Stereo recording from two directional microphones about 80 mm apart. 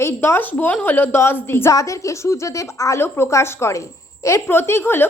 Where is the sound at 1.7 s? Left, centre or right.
Left.